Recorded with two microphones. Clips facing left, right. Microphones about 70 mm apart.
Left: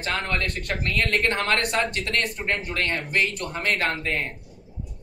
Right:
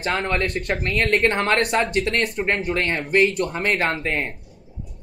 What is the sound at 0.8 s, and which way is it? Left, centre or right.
Speech, right.